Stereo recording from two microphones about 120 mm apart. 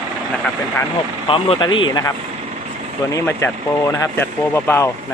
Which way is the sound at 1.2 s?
45° left (ahead or behind).